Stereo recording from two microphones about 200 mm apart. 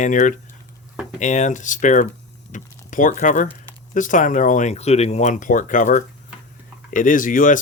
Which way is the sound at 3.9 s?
40° left (ahead or behind).